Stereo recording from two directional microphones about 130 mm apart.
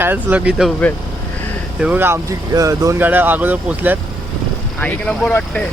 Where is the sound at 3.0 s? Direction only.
15° right (ahead or behind).